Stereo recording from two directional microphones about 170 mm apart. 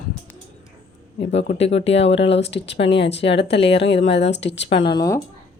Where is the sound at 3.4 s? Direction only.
35° left (ahead or behind).